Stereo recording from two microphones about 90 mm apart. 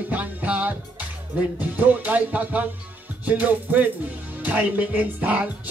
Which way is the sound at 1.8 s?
15° right (ahead or behind).